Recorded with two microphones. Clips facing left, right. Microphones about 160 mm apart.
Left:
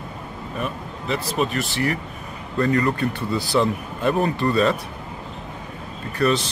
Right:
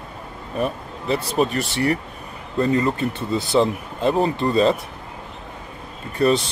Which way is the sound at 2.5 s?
25° right (ahead or behind).